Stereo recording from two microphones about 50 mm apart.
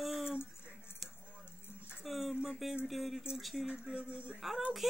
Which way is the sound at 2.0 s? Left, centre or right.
Centre.